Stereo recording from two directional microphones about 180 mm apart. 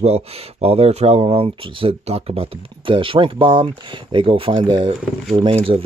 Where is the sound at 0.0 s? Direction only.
35° right (ahead or behind).